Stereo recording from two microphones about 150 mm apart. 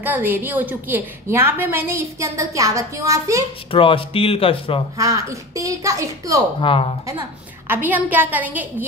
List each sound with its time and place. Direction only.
0.0 s a woman's voice: 10° right (ahead or behind)
3.7 s speech: 35° left (ahead or behind)
4.9 s speech: 20° right (ahead or behind)
6.6 s speech: 35° left (ahead or behind)
7.1 s a woman's voice: 15° right (ahead or behind)